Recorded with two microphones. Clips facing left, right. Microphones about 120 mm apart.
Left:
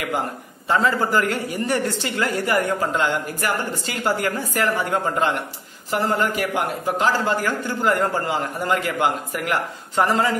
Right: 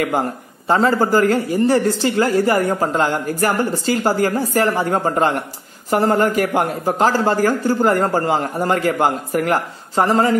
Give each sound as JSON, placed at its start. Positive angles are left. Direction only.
{"t": 0.7, "sound": "a woman's voice", "side_deg": -35}
{"t": 5.9, "sound": "a woman's voice", "side_deg": -50}